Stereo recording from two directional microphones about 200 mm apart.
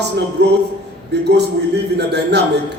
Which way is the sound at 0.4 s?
60° right (ahead or behind).